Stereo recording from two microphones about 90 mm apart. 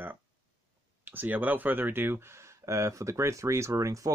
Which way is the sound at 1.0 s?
20° right (ahead or behind).